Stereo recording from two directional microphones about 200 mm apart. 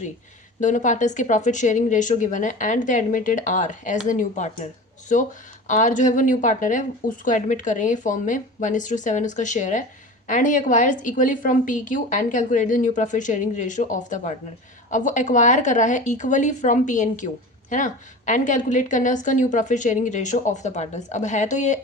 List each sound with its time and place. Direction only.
0.6 s a woman's voice: 40° left (ahead or behind)